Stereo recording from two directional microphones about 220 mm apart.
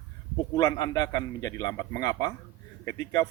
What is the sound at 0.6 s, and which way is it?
A man's voice, 15° left (ahead or behind).